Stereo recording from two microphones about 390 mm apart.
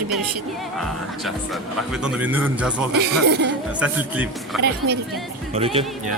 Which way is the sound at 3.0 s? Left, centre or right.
Right.